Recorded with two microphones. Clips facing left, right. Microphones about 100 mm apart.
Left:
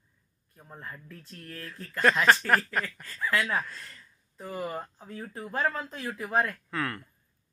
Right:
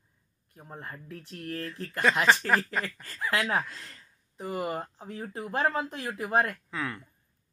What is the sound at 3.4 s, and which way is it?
Speech, 25° right (ahead or behind).